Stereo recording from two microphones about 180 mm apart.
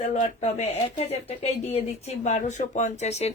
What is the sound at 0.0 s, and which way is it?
A woman's voice, 40° left (ahead or behind).